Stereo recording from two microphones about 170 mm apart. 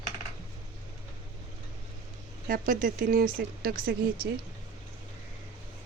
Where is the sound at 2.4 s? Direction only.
55° right (ahead or behind).